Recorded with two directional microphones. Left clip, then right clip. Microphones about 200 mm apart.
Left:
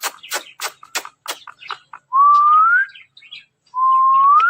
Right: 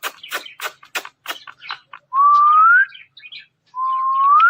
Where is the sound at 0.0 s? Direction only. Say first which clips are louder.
Left 1 dB; 15° left (ahead or behind).